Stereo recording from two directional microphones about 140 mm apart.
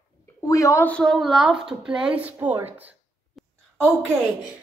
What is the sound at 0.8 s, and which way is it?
A woman's voice, 5° left (ahead or behind).